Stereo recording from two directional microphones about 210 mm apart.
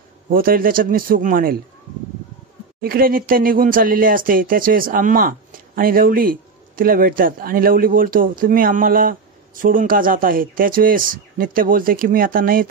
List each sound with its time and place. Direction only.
0.3 s speech: 45° right (ahead or behind)
2.8 s speech: 45° right (ahead or behind)